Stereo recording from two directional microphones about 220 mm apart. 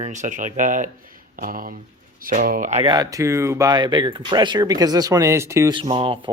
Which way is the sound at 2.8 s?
15° right (ahead or behind).